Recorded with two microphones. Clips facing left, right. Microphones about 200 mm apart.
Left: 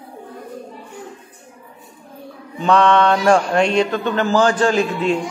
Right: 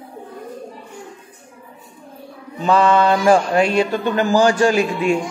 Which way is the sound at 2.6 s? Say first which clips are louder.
Even; 5° right (ahead or behind).